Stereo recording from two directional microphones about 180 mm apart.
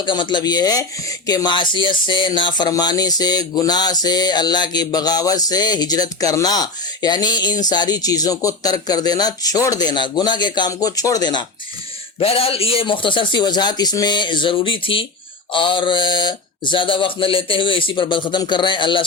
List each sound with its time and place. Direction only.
0.0 s speech: 25° left (ahead or behind)